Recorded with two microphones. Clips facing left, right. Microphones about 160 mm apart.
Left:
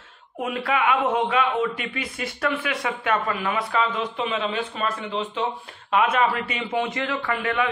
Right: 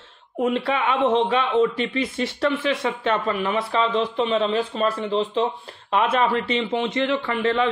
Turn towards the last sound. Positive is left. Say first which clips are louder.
# right 3 dB
turn(degrees=-30)  # may be behind; listen again after turning